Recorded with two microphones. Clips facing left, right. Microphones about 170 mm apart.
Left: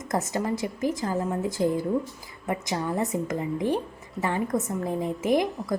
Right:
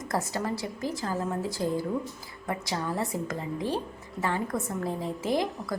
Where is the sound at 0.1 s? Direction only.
20° left (ahead or behind).